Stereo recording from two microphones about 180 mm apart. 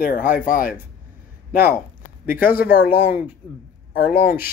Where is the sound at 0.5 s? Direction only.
50° left (ahead or behind).